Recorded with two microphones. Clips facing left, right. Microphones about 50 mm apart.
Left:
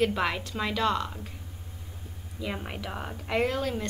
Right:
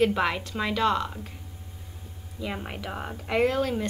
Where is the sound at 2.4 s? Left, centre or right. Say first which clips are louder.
Right 1 dB; centre.